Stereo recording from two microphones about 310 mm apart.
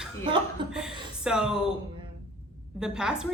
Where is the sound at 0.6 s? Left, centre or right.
Centre.